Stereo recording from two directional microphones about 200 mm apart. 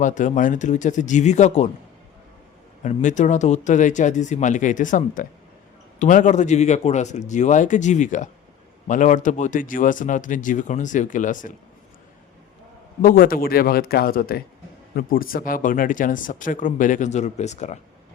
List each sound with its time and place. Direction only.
0.0 s speech: 40° left (ahead or behind)
2.8 s speech: 40° left (ahead or behind)
13.0 s a man's voice: 45° left (ahead or behind)